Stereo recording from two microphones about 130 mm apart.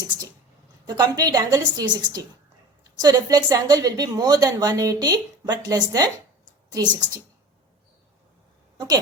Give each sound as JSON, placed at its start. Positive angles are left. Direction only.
{"t": 0.9, "sound": "a woman's voice", "side_deg": -30}